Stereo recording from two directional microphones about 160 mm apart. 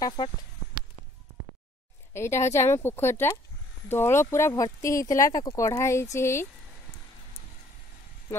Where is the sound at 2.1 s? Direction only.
15° left (ahead or behind).